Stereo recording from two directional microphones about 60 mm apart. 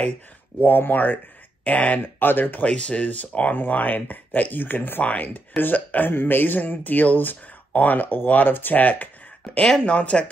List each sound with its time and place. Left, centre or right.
0.6 s speech: left
9.6 s speech: centre